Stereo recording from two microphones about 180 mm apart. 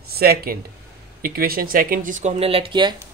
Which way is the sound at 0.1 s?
60° right (ahead or behind).